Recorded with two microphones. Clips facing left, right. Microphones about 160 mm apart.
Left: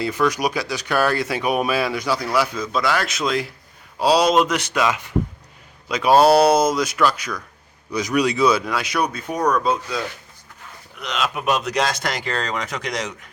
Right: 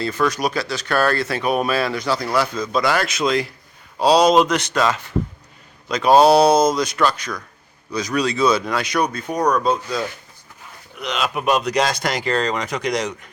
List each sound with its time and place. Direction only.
0.0 s speech: 10° left (ahead or behind)
7.9 s speech: 20° left (ahead or behind)
11.0 s speech: centre (ahead or behind)